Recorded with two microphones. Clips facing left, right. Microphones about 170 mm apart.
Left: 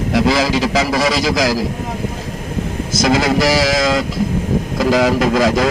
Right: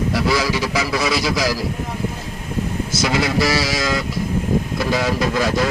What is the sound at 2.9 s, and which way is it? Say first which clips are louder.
Speech: left 6 dB; 90° left.